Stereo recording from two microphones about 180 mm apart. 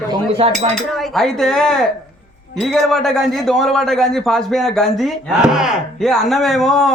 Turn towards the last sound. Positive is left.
turn(degrees=0)  # may be behind; listen again after turning